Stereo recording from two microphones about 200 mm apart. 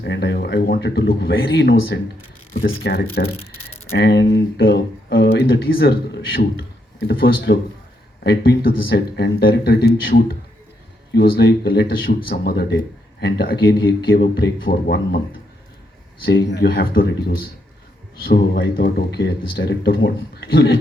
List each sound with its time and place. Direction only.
0.0 s speech: 60° left (ahead or behind)
7.1 s speech: 50° left (ahead or behind)
16.5 s speech: 60° left (ahead or behind)
18.3 s speech: 60° left (ahead or behind)